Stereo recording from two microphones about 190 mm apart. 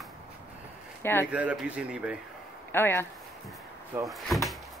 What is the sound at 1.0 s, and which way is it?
Speech, 10° left (ahead or behind).